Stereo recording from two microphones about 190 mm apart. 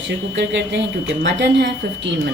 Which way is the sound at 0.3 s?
65° right (ahead or behind).